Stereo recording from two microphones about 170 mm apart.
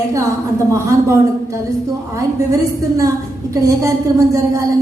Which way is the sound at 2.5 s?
20° right (ahead or behind).